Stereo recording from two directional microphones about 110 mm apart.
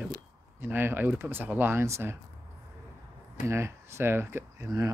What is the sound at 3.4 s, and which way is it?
Speech, 25° right (ahead or behind).